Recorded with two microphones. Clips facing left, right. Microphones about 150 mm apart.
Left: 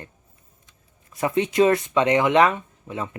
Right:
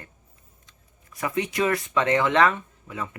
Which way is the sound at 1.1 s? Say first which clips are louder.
Left 6 dB; 25° left (ahead or behind).